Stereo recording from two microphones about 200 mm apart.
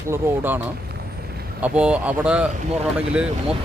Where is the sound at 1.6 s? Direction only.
5° right (ahead or behind).